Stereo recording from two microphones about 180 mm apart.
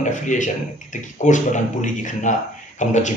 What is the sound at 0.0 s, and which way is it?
Speech, 45° left (ahead or behind).